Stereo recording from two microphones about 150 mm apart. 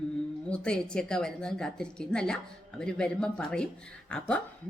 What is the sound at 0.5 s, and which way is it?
A woman's voice, 5° left (ahead or behind).